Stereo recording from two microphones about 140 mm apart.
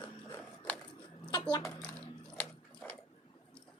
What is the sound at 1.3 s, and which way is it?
Coin, 25° left (ahead or behind).